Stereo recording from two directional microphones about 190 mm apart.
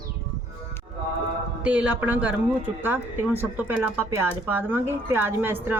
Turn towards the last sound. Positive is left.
turn(degrees=-10)  # may be behind; listen again after turning